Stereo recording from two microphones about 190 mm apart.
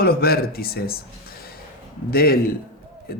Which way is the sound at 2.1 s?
50° left (ahead or behind).